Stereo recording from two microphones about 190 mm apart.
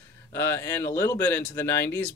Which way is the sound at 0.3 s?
15° left (ahead or behind).